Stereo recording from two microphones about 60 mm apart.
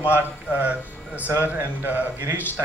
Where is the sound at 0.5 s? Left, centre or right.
Right.